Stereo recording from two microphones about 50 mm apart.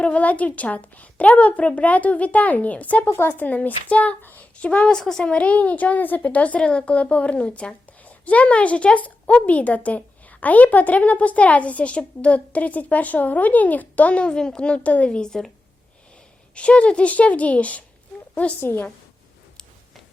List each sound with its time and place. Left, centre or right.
0.0 s a woman's voice: left
4.5 s speech: left
5.3 s a woman's voice: left
16.6 s a woman's voice: left
18.6 s a woman's voice: left